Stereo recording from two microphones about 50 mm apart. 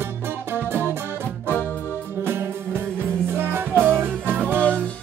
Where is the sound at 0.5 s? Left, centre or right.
Right.